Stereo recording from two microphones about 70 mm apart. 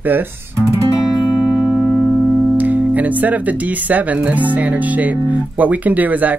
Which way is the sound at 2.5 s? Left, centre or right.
Right.